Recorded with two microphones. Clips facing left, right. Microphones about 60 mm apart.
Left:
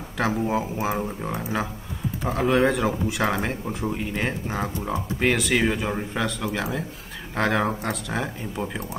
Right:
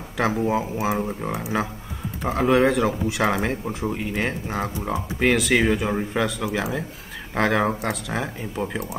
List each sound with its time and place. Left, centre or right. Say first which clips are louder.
0.2 s speech: right 2 dB; centre
2.2 s speech: right 2 dB; centre
4.7 s speech: right 1 dB; centre
5.2 s speech: right 3 dB; centre